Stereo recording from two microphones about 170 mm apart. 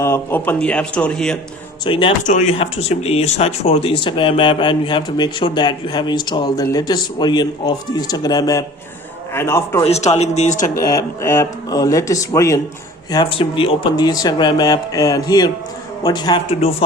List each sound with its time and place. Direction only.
0.0 s a man's voice: 15° left (ahead or behind)
1.8 s speech: 30° left (ahead or behind)
2.2 s speech: 45° left (ahead or behind)
2.6 s a man's voice: 35° left (ahead or behind); by 9.8 s 15° left (ahead or behind)
9.8 s speech: 40° left (ahead or behind)
10.8 s speech: 20° left (ahead or behind); by 16.7 s 35° left (ahead or behind)